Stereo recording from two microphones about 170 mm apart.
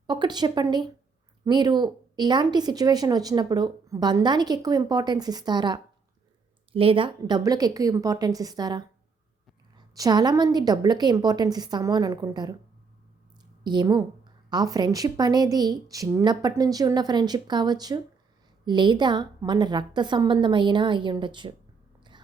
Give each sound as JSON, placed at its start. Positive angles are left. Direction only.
{"t": 0.1, "sound": "a woman's voice", "side_deg": -25}
{"t": 13.7, "sound": "a woman's voice", "side_deg": -25}